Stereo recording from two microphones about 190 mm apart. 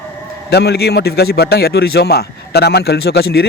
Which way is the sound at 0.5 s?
60° left (ahead or behind).